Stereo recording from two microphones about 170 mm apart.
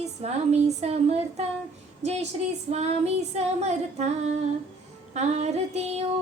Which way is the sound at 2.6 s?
40° right (ahead or behind).